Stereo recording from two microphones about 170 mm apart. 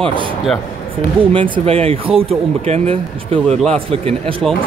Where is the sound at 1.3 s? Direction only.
30° right (ahead or behind).